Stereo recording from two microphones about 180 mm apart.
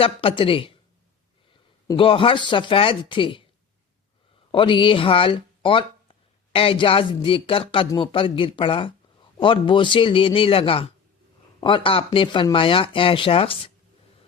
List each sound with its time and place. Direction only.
0.0 s speech: 30° left (ahead or behind)
1.9 s speech: 30° left (ahead or behind)
4.5 s speech: 25° left (ahead or behind)